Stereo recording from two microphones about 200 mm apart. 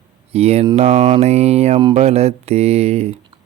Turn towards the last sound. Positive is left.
turn(degrees=-30)  # may be behind; listen again after turning